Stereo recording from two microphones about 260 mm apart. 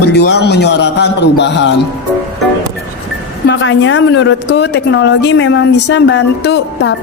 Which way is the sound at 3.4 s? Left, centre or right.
Left.